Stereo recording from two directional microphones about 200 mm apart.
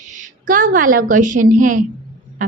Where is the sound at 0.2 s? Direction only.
40° right (ahead or behind).